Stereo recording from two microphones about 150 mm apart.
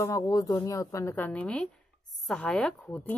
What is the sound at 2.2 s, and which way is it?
Speech, 5° left (ahead or behind).